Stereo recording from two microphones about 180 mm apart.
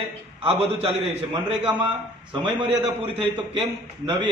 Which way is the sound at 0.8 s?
35° right (ahead or behind).